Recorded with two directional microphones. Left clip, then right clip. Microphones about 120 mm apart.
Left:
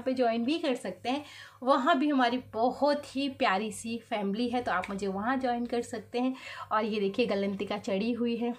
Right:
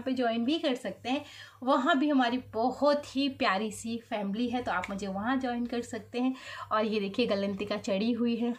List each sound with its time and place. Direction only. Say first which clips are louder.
0.0 s a woman's voice: left 2 dB; 25° left (ahead or behind)
6.7 s a woman's voice: even; 15° left (ahead or behind)